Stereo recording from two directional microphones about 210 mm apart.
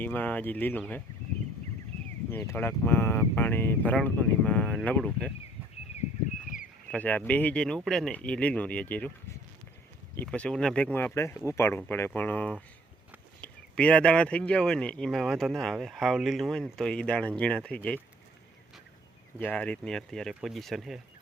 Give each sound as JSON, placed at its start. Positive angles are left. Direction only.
{"t": 0.0, "sound": "speech", "side_deg": 10}
{"t": 2.3, "sound": "speech", "side_deg": 10}
{"t": 6.9, "sound": "speech", "side_deg": 5}
{"t": 10.2, "sound": "speech", "side_deg": 5}
{"t": 19.4, "sound": "speech", "side_deg": 5}